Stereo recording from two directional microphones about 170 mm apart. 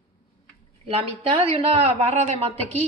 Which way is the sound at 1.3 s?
35° right (ahead or behind).